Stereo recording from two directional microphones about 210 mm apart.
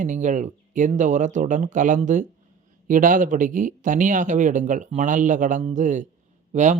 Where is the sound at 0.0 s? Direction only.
35° right (ahead or behind).